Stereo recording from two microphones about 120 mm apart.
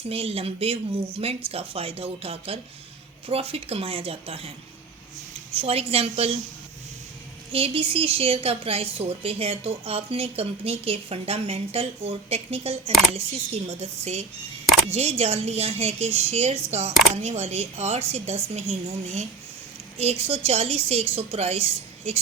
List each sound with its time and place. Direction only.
0.1 s a woman's voice: 55° right (ahead or behind)
5.5 s a woman's voice: 55° right (ahead or behind)
7.5 s a woman's voice: 50° right (ahead or behind)